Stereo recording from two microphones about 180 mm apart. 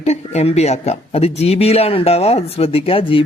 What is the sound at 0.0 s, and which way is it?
Speech, 35° left (ahead or behind).